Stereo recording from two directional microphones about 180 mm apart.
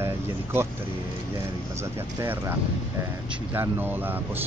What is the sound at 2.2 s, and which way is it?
Speech, 10° right (ahead or behind).